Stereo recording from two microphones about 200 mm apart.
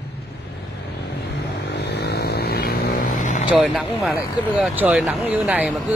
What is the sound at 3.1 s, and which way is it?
Vehicle, 40° left (ahead or behind).